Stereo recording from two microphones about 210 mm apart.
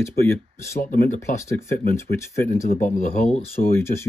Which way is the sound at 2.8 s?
30° left (ahead or behind).